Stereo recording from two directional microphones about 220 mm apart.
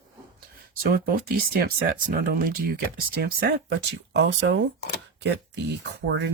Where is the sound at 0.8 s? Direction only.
40° right (ahead or behind).